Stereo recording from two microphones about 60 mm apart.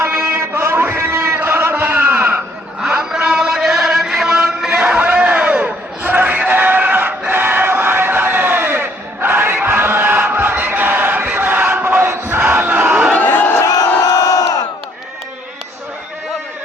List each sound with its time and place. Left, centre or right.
0.0 s a sound: right
2.8 s chant: centre; by 12.4 s right
12.4 s crowd: right
13.1 s crowd: left
13.6 s crowd: left